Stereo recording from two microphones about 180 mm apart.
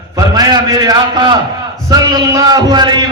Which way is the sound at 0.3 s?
20° right (ahead or behind).